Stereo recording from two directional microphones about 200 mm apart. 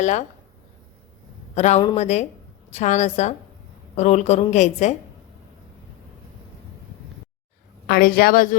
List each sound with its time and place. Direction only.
0.0 s a woman's voice: 35° left (ahead or behind)
1.5 s a woman's voice: 35° left (ahead or behind)
7.9 s a woman's voice: 45° left (ahead or behind)